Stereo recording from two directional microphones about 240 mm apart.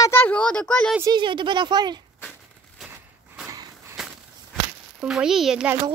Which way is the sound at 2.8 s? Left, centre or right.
Centre.